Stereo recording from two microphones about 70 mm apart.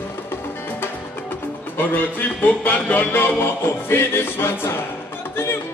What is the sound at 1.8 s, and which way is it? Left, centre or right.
Music, left.